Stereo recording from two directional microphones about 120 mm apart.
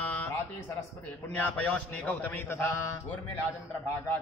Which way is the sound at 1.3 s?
10° left (ahead or behind).